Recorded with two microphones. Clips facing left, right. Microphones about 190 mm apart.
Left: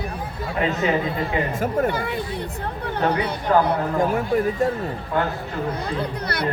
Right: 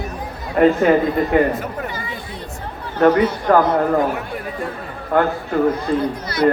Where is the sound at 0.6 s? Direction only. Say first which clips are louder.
Right 9 dB; 55° right (ahead or behind).